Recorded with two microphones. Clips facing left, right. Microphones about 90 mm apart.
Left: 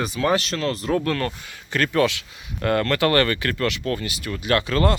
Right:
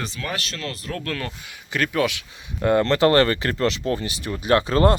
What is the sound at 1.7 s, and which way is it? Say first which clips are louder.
Speech: left 2 dB; 5° right (ahead or behind).